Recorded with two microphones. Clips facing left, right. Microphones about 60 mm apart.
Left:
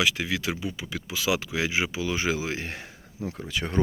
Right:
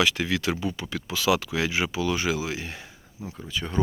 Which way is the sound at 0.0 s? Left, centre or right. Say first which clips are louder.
Right 2 dB; centre.